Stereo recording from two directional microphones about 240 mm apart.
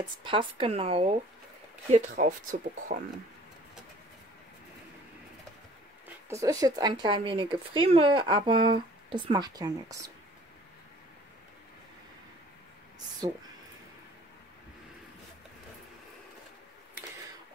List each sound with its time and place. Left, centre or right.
0.2 s speech: right
6.2 s speech: centre
13.2 s speech: centre